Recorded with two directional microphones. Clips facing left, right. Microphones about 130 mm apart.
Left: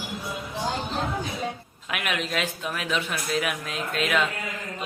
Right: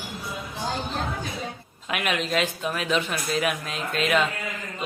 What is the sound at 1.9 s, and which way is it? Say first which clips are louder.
Speech: right 3 dB; centre (ahead or behind).